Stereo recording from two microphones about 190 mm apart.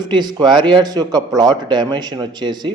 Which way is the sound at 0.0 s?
20° right (ahead or behind).